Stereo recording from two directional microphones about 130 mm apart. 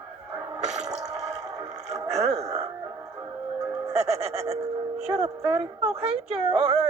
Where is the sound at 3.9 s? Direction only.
55° right (ahead or behind).